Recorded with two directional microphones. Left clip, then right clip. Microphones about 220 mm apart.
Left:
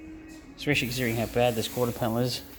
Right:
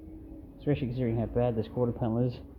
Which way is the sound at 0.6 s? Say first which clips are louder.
Left 5 dB; 10° left (ahead or behind).